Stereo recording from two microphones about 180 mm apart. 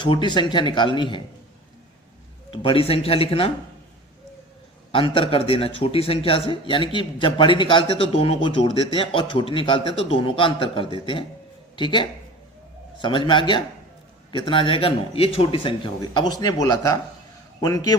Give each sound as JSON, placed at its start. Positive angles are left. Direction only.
{"t": 0.0, "sound": "a man's voice", "side_deg": 25}
{"t": 2.5, "sound": "speech", "side_deg": 30}
{"t": 4.9, "sound": "a man's voice", "side_deg": 30}